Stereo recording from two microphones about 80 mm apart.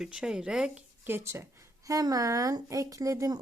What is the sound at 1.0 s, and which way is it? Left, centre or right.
A woman's voice, right.